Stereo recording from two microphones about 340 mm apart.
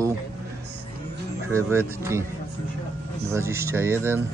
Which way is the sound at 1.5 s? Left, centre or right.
Centre.